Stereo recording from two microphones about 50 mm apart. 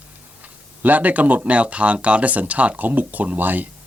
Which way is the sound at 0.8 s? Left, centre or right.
Right.